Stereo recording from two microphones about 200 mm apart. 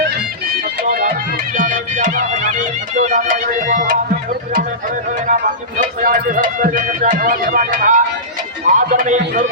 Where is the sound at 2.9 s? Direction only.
40° right (ahead or behind).